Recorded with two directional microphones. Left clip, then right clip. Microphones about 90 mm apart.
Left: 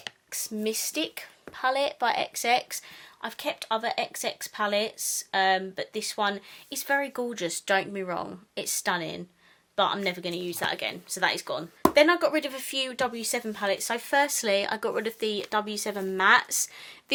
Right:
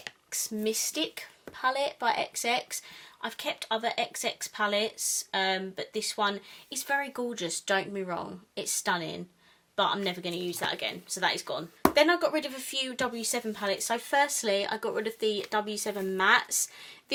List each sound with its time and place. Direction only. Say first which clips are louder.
0.3 s speech: even; 30° left (ahead or behind)